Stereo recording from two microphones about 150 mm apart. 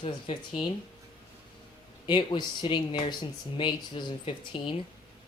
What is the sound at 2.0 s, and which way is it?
A woman's voice, 30° left (ahead or behind).